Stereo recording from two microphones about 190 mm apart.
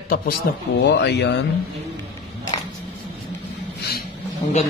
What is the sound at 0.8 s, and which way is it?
Speech, 65° left (ahead or behind).